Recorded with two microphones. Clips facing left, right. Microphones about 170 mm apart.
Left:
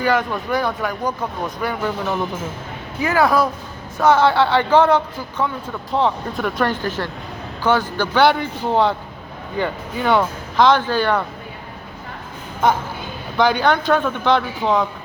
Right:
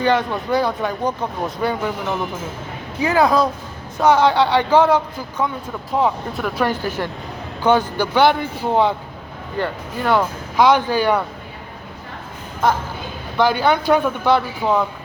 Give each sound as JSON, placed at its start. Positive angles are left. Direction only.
{"t": 0.0, "sound": "speech", "side_deg": -20}
{"t": 3.0, "sound": "speech", "side_deg": -20}
{"t": 10.6, "sound": "speech", "side_deg": -10}
{"t": 13.3, "sound": "speech", "side_deg": -5}